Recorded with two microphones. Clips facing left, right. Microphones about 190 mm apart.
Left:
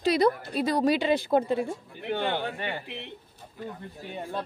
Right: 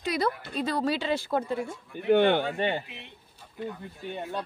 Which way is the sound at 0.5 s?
15° left (ahead or behind).